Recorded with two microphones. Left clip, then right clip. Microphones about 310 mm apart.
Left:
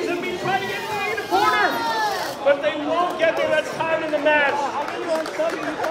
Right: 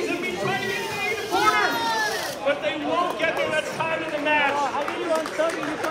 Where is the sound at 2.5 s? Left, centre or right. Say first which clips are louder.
Left 5 dB; left.